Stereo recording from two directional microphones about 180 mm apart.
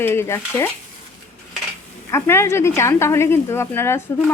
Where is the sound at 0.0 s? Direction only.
15° left (ahead or behind).